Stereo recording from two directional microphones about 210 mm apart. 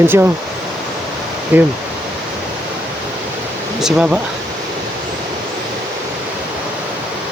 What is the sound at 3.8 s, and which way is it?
Speech, 5° right (ahead or behind).